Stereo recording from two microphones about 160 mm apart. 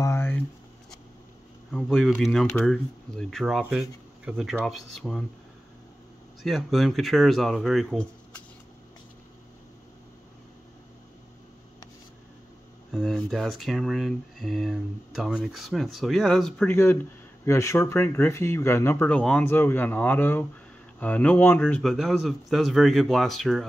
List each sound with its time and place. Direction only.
0.0 s writing: 15° left (ahead or behind)
1.7 s speech: 5° left (ahead or behind)
6.4 s speech: centre (ahead or behind)
12.9 s speech: centre (ahead or behind)
16.7 s speech: 15° left (ahead or behind)
21.8 s speech: centre (ahead or behind)